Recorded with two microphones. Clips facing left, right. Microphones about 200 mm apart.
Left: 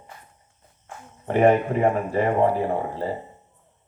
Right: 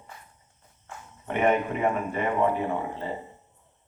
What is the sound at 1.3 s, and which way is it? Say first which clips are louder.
Speech: left 6 dB; 35° left (ahead or behind).